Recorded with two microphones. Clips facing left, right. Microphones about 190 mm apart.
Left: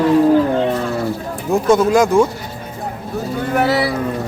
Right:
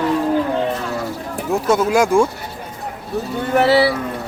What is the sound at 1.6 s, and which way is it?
Speech, 5° right (ahead or behind).